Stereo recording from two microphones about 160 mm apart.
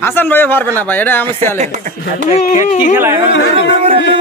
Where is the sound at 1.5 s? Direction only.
50° right (ahead or behind).